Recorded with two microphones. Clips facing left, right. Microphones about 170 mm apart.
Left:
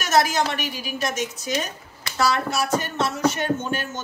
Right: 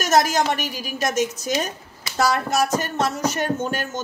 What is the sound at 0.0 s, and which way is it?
A woman's voice, 40° right (ahead or behind).